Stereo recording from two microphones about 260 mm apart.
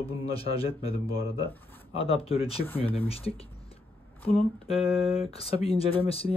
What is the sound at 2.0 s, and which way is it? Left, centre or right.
Speech, left.